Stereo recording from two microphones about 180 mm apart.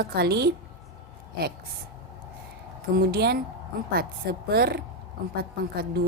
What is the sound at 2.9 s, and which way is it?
Speech, 60° right (ahead or behind).